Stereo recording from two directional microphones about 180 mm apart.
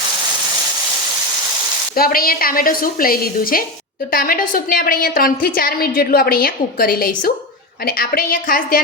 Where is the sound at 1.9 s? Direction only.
55° left (ahead or behind).